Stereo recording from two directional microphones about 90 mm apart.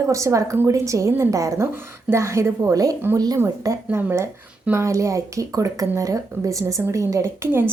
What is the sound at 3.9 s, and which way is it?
Speech, 30° right (ahead or behind).